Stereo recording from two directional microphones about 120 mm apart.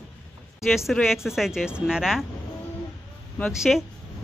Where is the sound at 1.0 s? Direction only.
5° right (ahead or behind).